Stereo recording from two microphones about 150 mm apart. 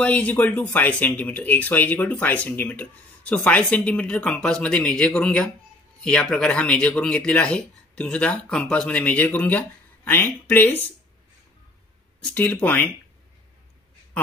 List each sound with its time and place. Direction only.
0.0 s speech: 10° left (ahead or behind)
12.4 s speech: 10° left (ahead or behind)